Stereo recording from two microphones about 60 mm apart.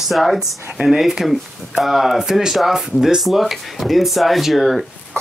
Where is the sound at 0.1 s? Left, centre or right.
Centre.